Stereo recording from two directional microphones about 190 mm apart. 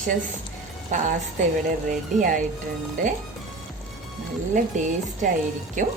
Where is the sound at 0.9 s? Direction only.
40° right (ahead or behind).